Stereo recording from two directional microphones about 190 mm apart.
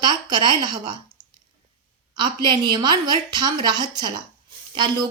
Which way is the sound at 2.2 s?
25° right (ahead or behind).